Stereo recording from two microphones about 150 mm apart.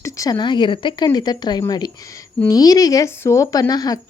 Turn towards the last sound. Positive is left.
turn(degrees=25)  # may be behind; listen again after turning